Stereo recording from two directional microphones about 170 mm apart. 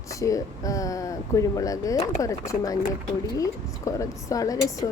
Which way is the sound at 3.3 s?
20° left (ahead or behind).